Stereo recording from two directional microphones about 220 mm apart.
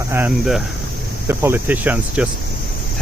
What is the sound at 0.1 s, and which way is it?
Cricket, 5° right (ahead or behind).